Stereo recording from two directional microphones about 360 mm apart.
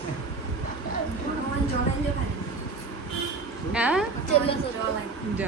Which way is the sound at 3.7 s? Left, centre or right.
Centre.